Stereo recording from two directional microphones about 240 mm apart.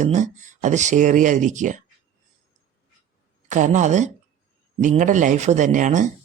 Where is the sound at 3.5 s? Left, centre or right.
Right.